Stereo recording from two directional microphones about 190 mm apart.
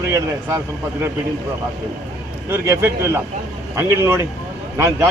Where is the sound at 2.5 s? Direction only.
15° right (ahead or behind).